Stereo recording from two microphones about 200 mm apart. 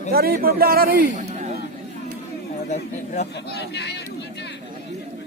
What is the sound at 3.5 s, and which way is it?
Speech, 55° left (ahead or behind).